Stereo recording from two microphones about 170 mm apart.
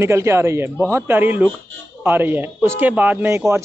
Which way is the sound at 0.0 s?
15° right (ahead or behind).